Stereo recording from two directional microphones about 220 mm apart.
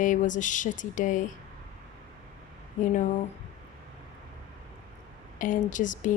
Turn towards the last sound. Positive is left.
turn(degrees=35)  # may be behind; listen again after turning